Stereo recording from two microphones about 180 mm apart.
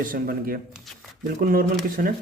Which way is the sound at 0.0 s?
55° right (ahead or behind).